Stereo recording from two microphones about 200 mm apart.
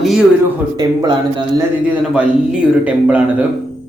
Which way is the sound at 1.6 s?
5° right (ahead or behind).